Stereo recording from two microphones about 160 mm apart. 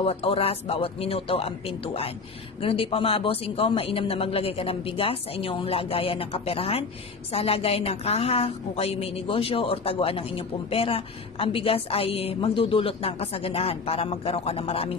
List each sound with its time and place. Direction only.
0.0 s a woman's voice: 35° left (ahead or behind)